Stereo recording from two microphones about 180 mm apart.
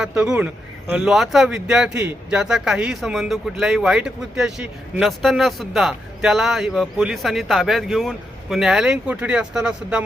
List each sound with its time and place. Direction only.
0.0 s speech: 5° right (ahead or behind)